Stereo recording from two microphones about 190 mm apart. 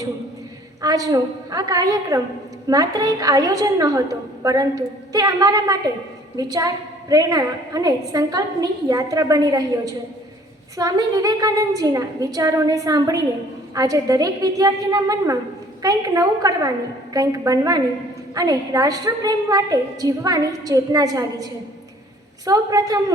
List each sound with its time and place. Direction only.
0.8 s a woman's voice: 20° right (ahead or behind)